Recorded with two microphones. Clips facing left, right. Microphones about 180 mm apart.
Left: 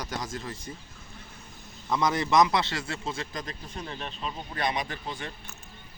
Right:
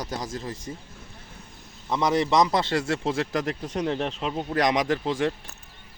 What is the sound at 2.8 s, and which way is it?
Speech, 75° right (ahead or behind).